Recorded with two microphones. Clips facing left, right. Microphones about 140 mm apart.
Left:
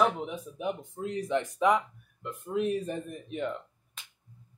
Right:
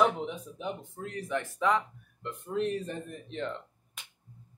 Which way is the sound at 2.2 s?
5° left (ahead or behind).